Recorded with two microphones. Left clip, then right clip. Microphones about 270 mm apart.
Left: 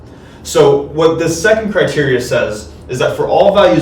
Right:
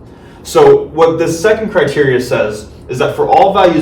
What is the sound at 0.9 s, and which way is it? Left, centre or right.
Speech, centre.